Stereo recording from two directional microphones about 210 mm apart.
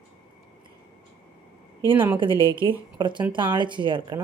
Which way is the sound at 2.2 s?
25° right (ahead or behind).